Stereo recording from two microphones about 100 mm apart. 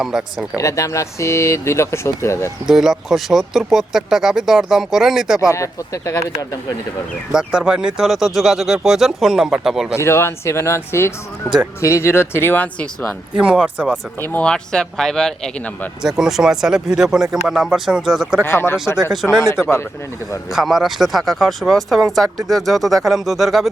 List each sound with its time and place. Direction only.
0.0 s speech: 5° right (ahead or behind)
0.5 s speech: 30° left (ahead or behind)
2.6 s speech: 5° right (ahead or behind)
5.5 s speech: 30° left (ahead or behind)
7.3 s speech: 5° right (ahead or behind)
9.9 s speech: 25° left (ahead or behind)
13.3 s speech: 10° right (ahead or behind)
14.3 s speech: 15° left (ahead or behind)
16.0 s speech: 5° right (ahead or behind)
18.4 s speech: 20° left (ahead or behind)
19.1 s speech: 5° right (ahead or behind)
20.5 s speech: centre (ahead or behind)